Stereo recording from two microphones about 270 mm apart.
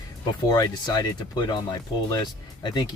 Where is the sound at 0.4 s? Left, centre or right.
Centre.